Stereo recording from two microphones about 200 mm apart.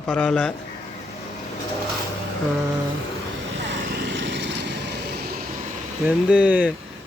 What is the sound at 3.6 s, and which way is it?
Lawn mower, 70° right (ahead or behind).